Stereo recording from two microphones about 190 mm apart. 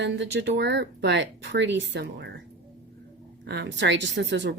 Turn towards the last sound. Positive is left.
turn(degrees=-65)  # may be behind; listen again after turning